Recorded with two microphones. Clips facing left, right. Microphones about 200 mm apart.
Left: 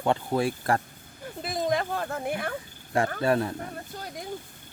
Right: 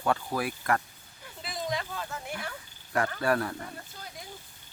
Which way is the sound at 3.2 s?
25° left (ahead or behind).